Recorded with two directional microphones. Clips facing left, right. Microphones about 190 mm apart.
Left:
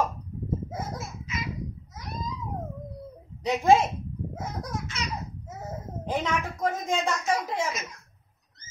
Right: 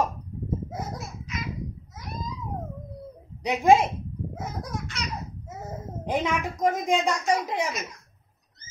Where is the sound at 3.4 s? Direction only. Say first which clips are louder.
Right 1 dB; 15° right (ahead or behind).